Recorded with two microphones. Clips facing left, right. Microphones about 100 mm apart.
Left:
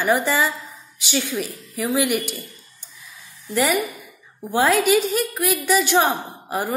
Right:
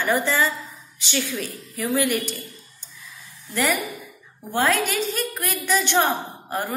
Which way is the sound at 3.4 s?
15° left (ahead or behind).